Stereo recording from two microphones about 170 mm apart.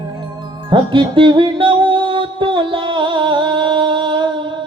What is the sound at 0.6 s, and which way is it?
Music, 30° right (ahead or behind).